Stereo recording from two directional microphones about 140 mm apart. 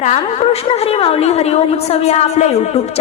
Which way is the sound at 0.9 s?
45° left (ahead or behind).